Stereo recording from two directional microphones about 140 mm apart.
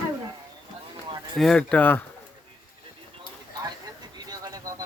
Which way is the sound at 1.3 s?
5° left (ahead or behind).